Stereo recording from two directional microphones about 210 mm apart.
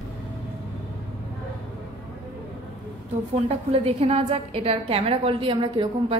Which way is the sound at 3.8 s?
30° right (ahead or behind).